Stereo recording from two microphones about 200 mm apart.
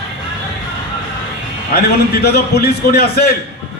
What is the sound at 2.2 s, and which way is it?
Speech, 55° left (ahead or behind).